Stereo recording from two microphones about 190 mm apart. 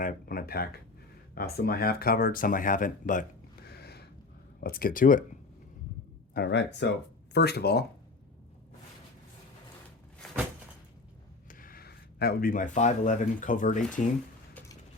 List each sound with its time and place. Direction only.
0.0 s speech: 50° left (ahead or behind)
3.7 s a sound: 55° left (ahead or behind)
4.6 s speech: 50° left (ahead or behind)
6.3 s speech: 65° left (ahead or behind)
11.6 s speech: 50° left (ahead or behind)